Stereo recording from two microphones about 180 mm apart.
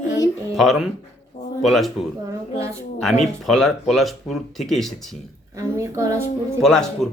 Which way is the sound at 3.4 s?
Centre (ahead or behind).